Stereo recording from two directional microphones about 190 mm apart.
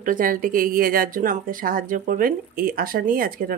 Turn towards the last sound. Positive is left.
turn(degrees=-50)  # may be behind; listen again after turning